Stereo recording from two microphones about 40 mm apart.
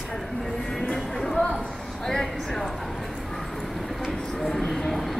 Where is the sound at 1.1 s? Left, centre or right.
Centre.